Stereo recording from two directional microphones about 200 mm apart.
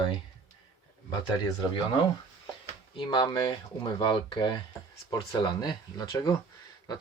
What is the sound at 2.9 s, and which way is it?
Speech, 25° left (ahead or behind).